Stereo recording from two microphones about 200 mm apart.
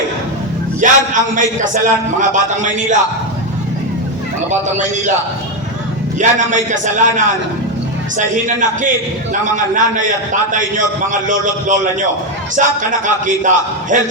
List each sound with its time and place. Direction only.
0.8 s a man's voice: 40° right (ahead or behind)
6.1 s a man's voice: 40° right (ahead or behind)